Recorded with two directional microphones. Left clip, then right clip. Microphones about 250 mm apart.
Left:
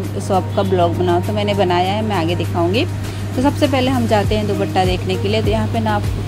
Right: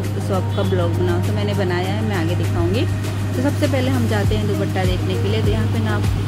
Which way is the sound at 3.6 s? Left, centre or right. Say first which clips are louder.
Left 4 dB; left.